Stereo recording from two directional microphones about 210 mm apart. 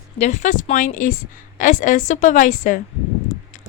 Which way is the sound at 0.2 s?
35° left (ahead or behind).